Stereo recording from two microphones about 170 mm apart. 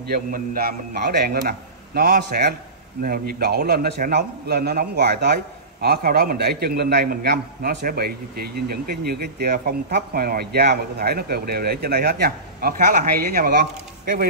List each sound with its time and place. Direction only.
0.0 s a man's voice: 60° right (ahead or behind)